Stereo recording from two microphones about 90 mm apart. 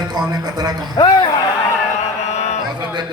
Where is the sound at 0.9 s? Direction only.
55° left (ahead or behind).